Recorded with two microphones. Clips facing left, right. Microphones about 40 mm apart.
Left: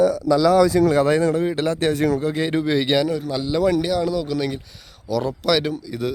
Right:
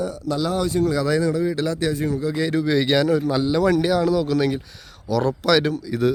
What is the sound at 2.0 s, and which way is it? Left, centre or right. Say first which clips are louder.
Speech: left 4 dB; left.